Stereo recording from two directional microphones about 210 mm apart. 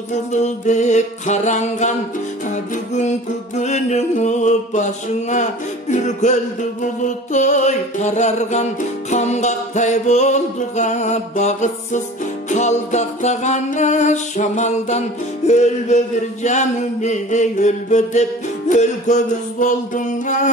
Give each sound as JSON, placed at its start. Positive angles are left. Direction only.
{"t": 0.1, "sound": "music", "side_deg": 35}